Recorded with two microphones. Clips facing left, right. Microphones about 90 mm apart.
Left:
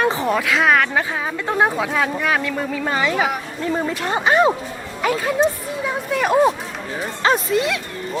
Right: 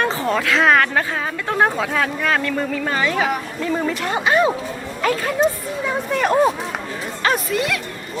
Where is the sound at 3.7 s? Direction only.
25° left (ahead or behind).